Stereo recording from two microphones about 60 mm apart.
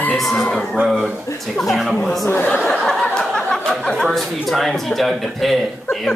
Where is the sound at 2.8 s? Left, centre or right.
Centre.